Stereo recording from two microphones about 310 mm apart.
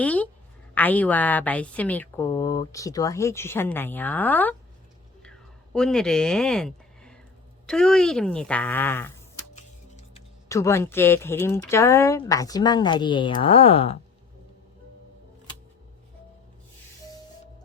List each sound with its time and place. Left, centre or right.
0.0 s a sound: centre
0.7 s a woman's voice: centre
5.7 s a woman's voice: centre
9.6 s music: left
10.5 s speech: centre